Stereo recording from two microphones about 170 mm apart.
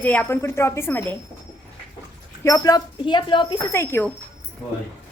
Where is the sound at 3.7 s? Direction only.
15° left (ahead or behind).